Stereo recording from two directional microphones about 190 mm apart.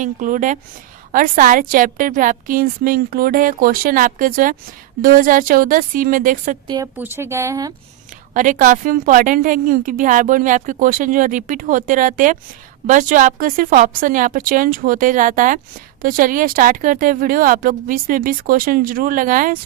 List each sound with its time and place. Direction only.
0.0 s a woman's voice: 40° right (ahead or behind)
6.7 s a woman's voice: 20° right (ahead or behind)
8.3 s a woman's voice: 45° right (ahead or behind)